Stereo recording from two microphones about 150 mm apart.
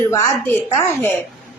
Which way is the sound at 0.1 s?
20° left (ahead or behind).